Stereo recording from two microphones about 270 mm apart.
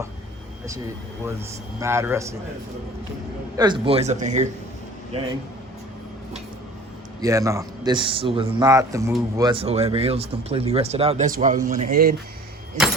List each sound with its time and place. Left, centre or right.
1.2 s a man's voice: centre
3.6 s speech: centre
7.2 s a man's voice: centre; by 12.1 s right